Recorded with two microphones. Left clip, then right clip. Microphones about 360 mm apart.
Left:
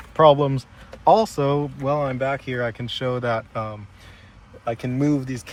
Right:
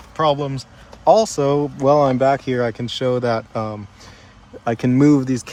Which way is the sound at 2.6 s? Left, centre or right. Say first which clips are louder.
Right 5 dB; centre.